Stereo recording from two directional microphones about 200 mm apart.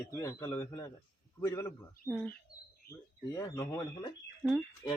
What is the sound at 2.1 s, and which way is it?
Speech, 5° left (ahead or behind).